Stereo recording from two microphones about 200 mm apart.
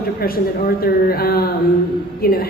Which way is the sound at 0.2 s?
50° left (ahead or behind).